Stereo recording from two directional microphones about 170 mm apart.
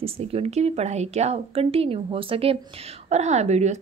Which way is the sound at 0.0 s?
35° right (ahead or behind).